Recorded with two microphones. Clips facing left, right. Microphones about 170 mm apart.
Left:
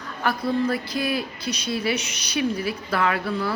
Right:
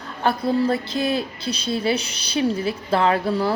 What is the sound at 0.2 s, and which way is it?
Speech, 25° right (ahead or behind).